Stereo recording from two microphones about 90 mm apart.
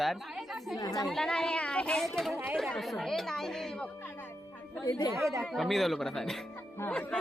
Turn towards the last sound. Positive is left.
turn(degrees=30)  # may be behind; listen again after turning